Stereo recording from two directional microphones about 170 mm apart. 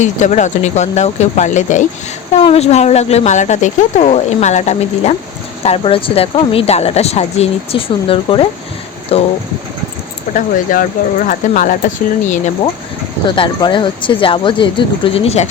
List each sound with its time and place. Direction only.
0.0 s speech: 45° left (ahead or behind)
10.3 s speech: 50° left (ahead or behind)
13.3 s speech: 30° left (ahead or behind)